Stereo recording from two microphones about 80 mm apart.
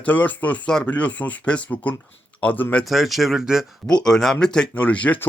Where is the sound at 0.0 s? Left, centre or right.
Left.